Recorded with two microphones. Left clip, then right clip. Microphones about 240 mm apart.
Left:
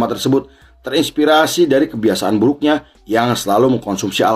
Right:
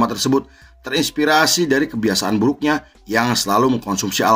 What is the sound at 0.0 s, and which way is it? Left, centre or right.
Speech, right.